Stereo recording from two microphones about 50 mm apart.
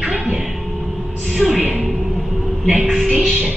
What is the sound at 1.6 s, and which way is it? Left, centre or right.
Music, centre.